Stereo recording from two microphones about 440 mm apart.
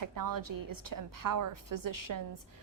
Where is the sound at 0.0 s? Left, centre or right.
Right.